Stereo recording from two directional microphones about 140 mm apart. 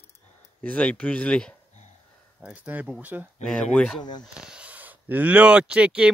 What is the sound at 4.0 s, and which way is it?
Speech, 30° left (ahead or behind).